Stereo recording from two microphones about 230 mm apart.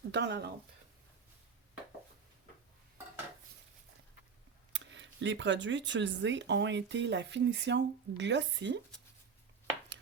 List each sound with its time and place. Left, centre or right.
0.1 s speech: right
4.7 s speech: right